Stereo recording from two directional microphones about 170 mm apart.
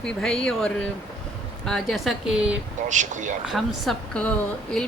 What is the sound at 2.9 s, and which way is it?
Speech, 45° right (ahead or behind).